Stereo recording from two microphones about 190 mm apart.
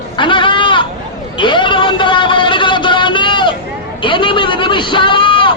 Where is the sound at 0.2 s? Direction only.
25° left (ahead or behind).